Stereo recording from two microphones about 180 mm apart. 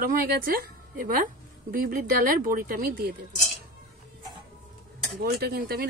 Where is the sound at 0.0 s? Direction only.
50° right (ahead or behind).